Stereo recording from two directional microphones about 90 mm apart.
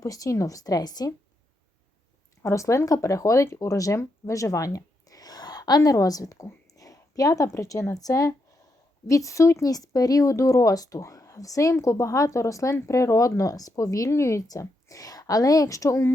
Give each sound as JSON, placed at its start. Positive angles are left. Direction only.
{"t": 0.0, "sound": "speech", "side_deg": 40}
{"t": 2.4, "sound": "speech", "side_deg": 35}